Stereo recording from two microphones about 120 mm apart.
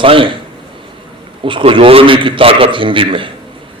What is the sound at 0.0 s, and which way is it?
Speech, 45° right (ahead or behind).